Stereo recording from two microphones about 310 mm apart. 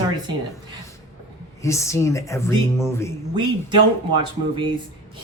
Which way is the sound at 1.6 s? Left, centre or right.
Centre.